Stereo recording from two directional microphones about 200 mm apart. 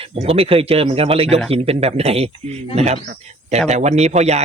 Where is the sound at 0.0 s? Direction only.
30° right (ahead or behind).